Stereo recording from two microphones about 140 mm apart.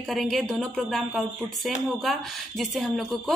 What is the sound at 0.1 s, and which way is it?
Speech, centre (ahead or behind).